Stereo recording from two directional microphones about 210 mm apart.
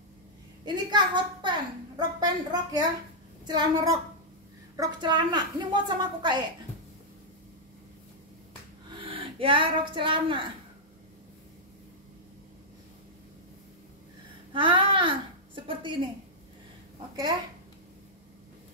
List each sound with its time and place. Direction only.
0.8 s a woman's voice: 20° right (ahead or behind)
9.0 s speech: 25° right (ahead or behind)
14.5 s a woman's voice: 25° right (ahead or behind)